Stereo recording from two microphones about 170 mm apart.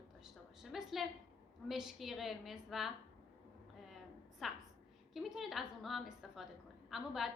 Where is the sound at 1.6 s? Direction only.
Centre (ahead or behind).